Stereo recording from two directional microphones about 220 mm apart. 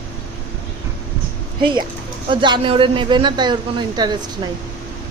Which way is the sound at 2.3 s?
20° right (ahead or behind).